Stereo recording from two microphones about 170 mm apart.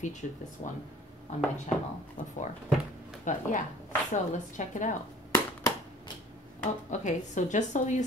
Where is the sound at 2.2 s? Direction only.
45° left (ahead or behind).